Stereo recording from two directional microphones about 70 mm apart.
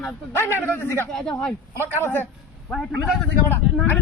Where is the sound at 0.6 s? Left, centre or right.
Left.